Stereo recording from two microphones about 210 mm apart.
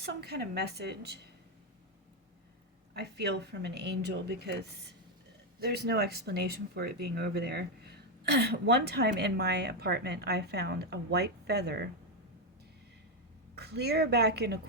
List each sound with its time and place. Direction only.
0.0 s speech: 50° right (ahead or behind)
2.9 s speech: 50° right (ahead or behind)
13.6 s speech: 50° right (ahead or behind)